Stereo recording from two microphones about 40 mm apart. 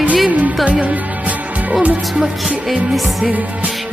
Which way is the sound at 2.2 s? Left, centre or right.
Centre.